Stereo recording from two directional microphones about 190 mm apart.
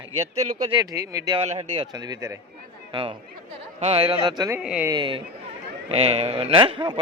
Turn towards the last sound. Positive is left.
turn(degrees=-25)  # may be behind; listen again after turning